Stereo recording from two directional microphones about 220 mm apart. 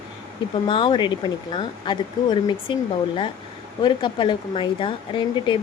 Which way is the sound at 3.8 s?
20° left (ahead or behind).